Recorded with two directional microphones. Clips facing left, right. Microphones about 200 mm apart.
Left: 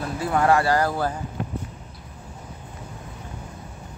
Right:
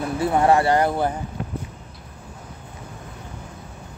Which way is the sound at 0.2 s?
25° right (ahead or behind).